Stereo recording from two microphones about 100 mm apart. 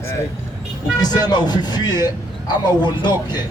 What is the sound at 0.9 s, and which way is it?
Speech, 45° left (ahead or behind).